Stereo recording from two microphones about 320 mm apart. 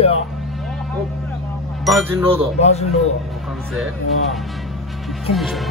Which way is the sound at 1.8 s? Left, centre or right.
Centre.